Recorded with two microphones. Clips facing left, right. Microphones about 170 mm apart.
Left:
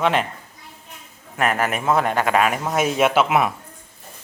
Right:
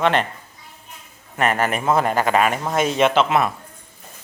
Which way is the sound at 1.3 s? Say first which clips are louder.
Right 1 dB; centre (ahead or behind).